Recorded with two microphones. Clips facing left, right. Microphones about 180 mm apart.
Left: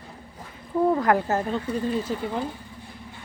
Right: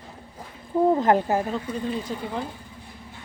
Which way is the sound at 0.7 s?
25° right (ahead or behind).